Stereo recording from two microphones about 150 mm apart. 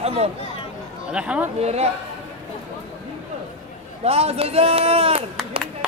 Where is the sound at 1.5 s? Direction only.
45° right (ahead or behind).